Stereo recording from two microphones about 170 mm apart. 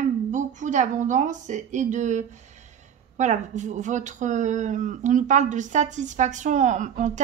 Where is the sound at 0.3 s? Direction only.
50° right (ahead or behind).